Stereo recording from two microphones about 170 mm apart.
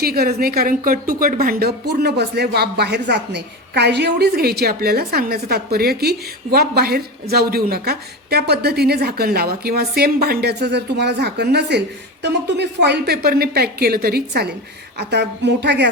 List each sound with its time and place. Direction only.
0.0 s a woman's voice: 65° right (ahead or behind)
14.9 s a woman's voice: 85° right